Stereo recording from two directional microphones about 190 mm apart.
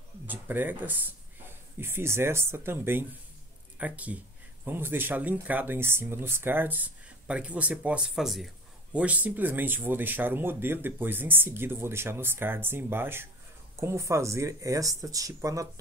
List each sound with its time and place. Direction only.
0.3 s speech: 10° right (ahead or behind)